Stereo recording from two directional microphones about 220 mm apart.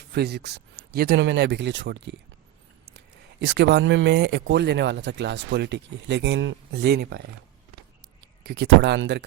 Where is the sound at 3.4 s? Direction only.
50° right (ahead or behind).